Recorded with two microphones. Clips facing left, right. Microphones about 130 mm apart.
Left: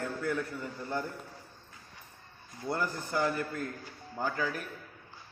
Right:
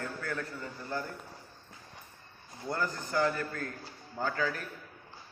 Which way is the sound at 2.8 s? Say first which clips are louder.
Right 2 dB; 20° left (ahead or behind).